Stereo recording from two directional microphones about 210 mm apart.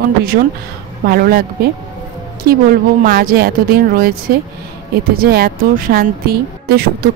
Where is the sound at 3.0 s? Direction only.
45° right (ahead or behind).